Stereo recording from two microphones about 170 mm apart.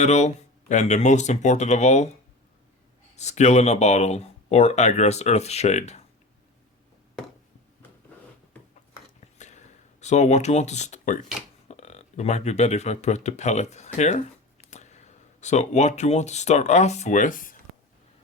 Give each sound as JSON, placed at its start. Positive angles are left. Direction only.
{"t": 0.0, "sound": "speech", "side_deg": 40}
{"t": 3.2, "sound": "speech", "side_deg": 40}
{"t": 9.4, "sound": "a sound", "side_deg": 45}
{"t": 11.7, "sound": "speech", "side_deg": 40}